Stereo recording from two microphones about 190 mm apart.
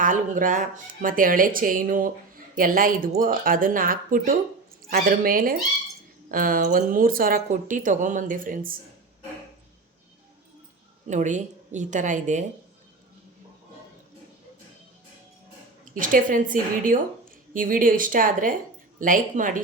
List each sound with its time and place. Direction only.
0.0 s speech: 45° right (ahead or behind)
11.0 s speech: 40° right (ahead or behind)
15.8 s speech: 45° right (ahead or behind)